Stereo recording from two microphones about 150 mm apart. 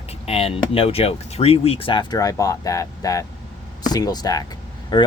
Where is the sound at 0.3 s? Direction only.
40° left (ahead or behind).